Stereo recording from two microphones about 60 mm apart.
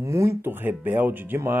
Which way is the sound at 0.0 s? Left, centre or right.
Right.